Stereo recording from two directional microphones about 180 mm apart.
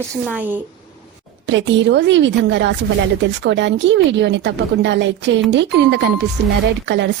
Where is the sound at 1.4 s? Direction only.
85° right.